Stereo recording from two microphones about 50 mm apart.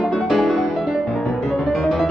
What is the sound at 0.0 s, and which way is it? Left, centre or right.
Music, centre.